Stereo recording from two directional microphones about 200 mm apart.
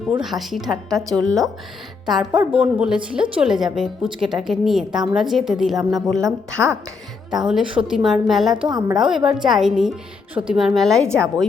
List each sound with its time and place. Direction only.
0.1 s a woman's voice: centre (ahead or behind)
7.3 s a woman's voice: centre (ahead or behind)
8.6 s a woman's voice: 20° right (ahead or behind)
9.0 s a woman's voice: 5° right (ahead or behind)